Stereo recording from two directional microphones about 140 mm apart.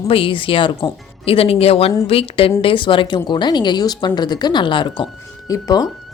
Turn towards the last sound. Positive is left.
turn(degrees=25)  # may be behind; listen again after turning